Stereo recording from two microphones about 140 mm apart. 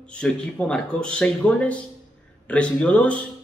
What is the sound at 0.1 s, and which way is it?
A man's voice, 5° left (ahead or behind).